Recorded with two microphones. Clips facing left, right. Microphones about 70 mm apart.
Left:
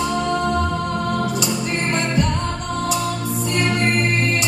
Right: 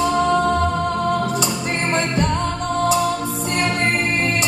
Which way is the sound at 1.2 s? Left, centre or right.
Right.